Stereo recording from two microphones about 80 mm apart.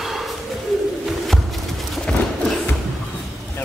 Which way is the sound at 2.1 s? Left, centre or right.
Centre.